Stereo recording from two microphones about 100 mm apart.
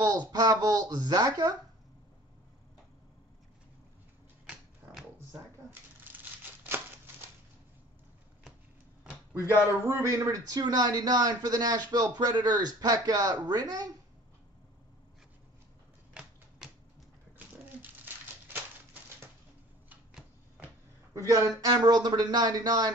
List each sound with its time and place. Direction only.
0.0 s a man's voice: 40° right (ahead or behind)
4.5 s a sound: 5° right (ahead or behind)
5.7 s crumpling: 20° right (ahead or behind)
9.8 s a man's voice: 30° right (ahead or behind)
16.1 s typewriter: 5° right (ahead or behind)
17.8 s a sound: 20° right (ahead or behind)
21.3 s speech: 35° right (ahead or behind)